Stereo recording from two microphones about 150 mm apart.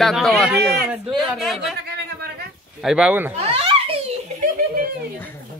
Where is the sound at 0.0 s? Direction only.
Centre (ahead or behind).